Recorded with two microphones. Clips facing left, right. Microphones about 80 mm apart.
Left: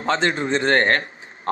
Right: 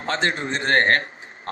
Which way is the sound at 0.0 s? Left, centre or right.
Left.